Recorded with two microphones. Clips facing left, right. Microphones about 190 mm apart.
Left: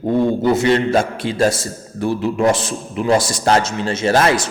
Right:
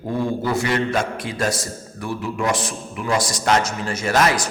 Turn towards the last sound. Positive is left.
turn(degrees=30)  # may be behind; listen again after turning